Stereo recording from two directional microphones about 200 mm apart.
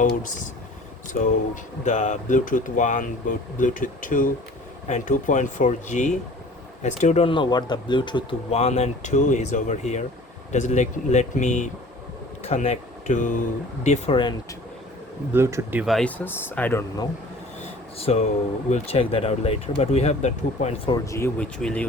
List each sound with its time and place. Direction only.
0.0 s speech: 40° left (ahead or behind)
1.8 s speech: 35° left (ahead or behind)
15.3 s speech: 15° right (ahead or behind); by 16.8 s 10° left (ahead or behind)
17.6 s a sound: 30° left (ahead or behind)
18.7 s speech: 30° left (ahead or behind)
20.9 s speech: 15° left (ahead or behind)